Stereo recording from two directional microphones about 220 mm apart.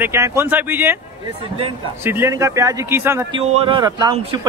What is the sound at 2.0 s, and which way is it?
A man's voice, 10° right (ahead or behind).